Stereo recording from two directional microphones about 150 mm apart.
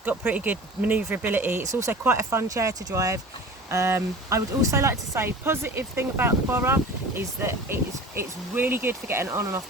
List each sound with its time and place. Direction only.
0.0 s speech: 10° right (ahead or behind)